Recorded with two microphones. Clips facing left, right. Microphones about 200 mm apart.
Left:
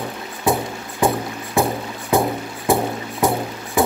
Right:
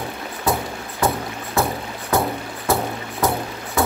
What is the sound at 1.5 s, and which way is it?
Music, 15° left (ahead or behind).